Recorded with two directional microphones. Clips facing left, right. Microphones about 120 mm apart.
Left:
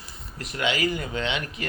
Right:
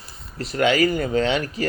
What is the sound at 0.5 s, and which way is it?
A man's voice, 45° right (ahead or behind).